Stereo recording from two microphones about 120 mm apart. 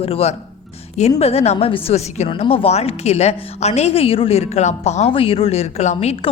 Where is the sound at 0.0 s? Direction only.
55° left (ahead or behind).